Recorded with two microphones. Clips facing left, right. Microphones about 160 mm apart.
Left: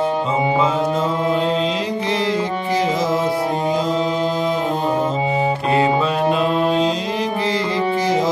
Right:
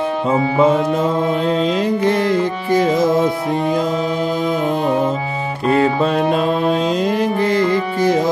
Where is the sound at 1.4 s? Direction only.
50° right (ahead or behind).